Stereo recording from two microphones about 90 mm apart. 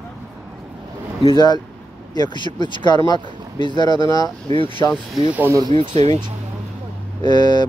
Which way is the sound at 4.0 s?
45° left (ahead or behind).